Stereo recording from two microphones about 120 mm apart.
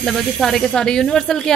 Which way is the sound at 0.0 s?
Centre (ahead or behind).